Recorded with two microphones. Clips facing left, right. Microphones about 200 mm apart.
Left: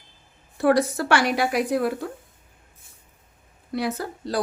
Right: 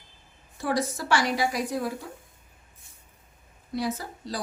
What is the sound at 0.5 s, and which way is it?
A woman's voice, 65° left (ahead or behind).